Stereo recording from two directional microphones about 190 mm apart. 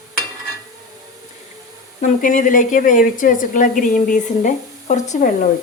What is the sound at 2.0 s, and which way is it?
A woman's voice, 45° left (ahead or behind).